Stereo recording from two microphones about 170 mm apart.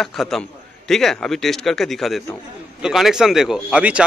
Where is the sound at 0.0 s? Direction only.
Centre (ahead or behind).